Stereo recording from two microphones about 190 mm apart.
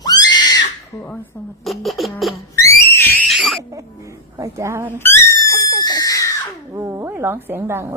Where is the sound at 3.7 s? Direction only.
15° right (ahead or behind).